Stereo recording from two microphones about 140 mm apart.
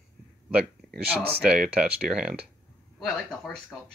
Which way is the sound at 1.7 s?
5° right (ahead or behind).